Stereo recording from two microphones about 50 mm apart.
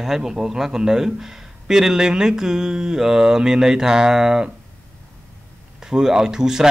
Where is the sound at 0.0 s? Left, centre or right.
Centre.